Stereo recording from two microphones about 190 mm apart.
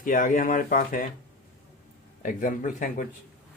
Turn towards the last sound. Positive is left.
turn(degrees=45)  # may be behind; listen again after turning